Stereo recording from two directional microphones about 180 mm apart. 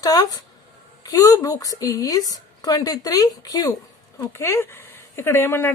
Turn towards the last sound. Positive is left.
turn(degrees=15)  # may be behind; listen again after turning